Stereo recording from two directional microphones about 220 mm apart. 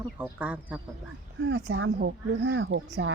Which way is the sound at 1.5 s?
55° right (ahead or behind).